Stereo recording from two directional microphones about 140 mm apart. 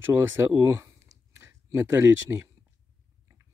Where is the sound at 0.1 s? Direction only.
15° right (ahead or behind).